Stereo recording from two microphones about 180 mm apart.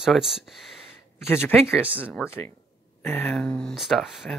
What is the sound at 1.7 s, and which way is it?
Speech, 10° right (ahead or behind).